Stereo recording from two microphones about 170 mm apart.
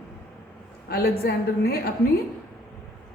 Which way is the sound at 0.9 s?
65° left (ahead or behind).